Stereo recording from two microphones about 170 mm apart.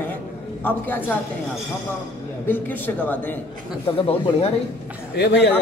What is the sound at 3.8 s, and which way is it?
Speech, 30° left (ahead or behind).